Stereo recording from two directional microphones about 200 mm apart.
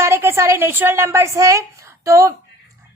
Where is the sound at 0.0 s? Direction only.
15° right (ahead or behind).